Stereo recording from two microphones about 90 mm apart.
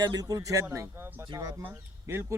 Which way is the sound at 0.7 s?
30° right (ahead or behind).